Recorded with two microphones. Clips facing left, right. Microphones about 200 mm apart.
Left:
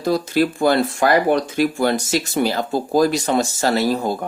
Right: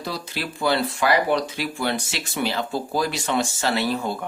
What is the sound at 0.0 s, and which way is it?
Speech, 45° left (ahead or behind).